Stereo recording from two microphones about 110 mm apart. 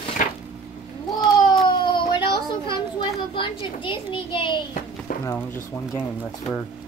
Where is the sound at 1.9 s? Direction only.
45° left (ahead or behind).